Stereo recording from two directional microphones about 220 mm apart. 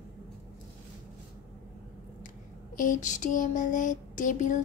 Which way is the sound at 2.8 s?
35° left (ahead or behind).